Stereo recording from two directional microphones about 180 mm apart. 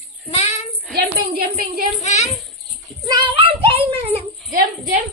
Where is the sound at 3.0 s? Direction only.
25° right (ahead or behind).